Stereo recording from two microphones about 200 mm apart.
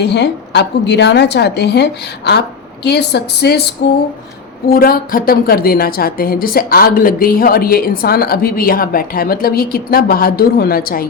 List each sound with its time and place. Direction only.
0.0 s a woman's voice: 60° left (ahead or behind)
4.7 s a woman's voice: 45° left (ahead or behind)